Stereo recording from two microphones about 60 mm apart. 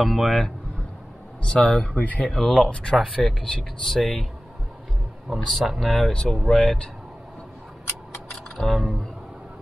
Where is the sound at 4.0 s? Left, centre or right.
Centre.